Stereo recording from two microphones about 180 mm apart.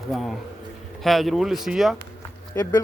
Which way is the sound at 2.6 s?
15° left (ahead or behind).